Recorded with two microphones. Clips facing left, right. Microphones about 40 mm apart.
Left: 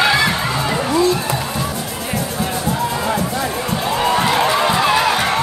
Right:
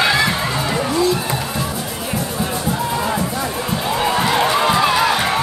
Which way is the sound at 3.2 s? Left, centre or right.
Centre.